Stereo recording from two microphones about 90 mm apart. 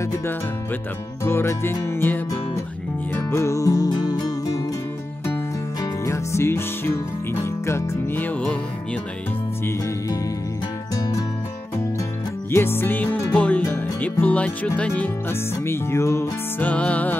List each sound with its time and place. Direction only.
1.2 s music: 30° left (ahead or behind); by 4.6 s 45° left (ahead or behind)
5.8 s music: 30° left (ahead or behind)
12.4 s music: 25° left (ahead or behind)
15.5 s music: 30° left (ahead or behind)
16.6 s music: 15° left (ahead or behind)